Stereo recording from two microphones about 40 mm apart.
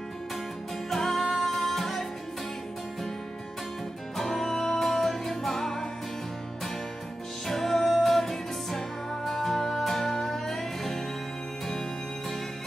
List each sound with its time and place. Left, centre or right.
0.8 s music: centre
4.2 s music: centre
7.4 s music: centre